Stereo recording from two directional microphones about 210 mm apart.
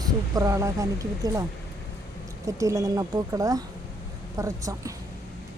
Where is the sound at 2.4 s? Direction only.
15° right (ahead or behind).